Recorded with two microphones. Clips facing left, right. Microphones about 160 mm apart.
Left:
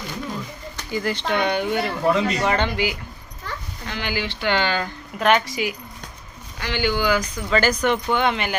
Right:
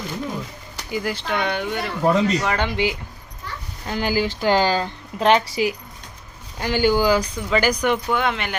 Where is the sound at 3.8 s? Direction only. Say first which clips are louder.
Right 6 dB; 40° right (ahead or behind).